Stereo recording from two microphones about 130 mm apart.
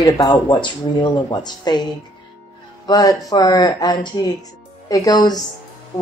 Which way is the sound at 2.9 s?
30° left (ahead or behind).